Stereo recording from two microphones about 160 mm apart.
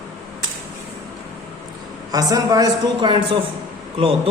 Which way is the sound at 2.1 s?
25° right (ahead or behind).